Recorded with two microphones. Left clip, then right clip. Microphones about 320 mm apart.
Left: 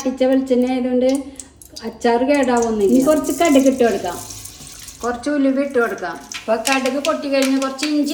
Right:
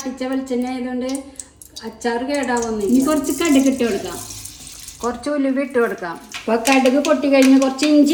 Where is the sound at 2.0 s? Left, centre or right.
Centre.